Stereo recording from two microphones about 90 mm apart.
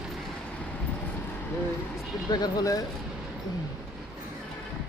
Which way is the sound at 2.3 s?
50° left (ahead or behind).